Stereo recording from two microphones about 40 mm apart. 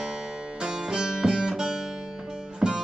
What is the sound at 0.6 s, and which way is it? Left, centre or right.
Music, centre.